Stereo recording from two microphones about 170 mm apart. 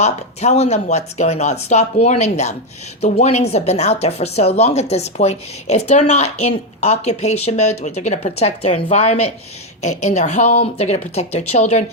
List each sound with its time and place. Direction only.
0.0 s a woman's voice: 40° left (ahead or behind)